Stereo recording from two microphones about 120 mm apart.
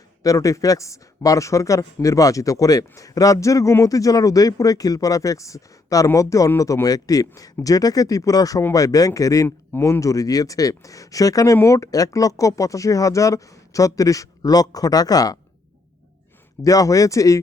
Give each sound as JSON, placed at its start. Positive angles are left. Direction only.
{"t": 0.2, "sound": "speech", "side_deg": 30}
{"t": 16.6, "sound": "speech", "side_deg": 30}